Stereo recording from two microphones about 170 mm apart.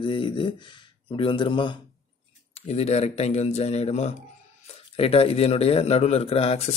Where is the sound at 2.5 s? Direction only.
40° left (ahead or behind).